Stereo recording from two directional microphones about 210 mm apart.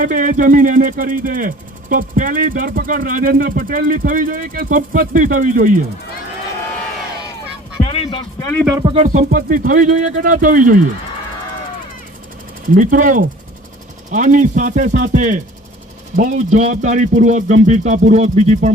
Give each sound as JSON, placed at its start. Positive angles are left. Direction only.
{"t": 0.0, "sound": "speech", "side_deg": -40}
{"t": 7.9, "sound": "a sound", "side_deg": 25}
{"t": 8.7, "sound": "speech", "side_deg": -20}
{"t": 9.0, "sound": "speech", "side_deg": -35}
{"t": 12.7, "sound": "speech", "side_deg": -40}